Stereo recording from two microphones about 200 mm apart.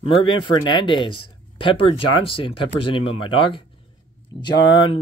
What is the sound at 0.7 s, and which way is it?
Speech, 25° left (ahead or behind).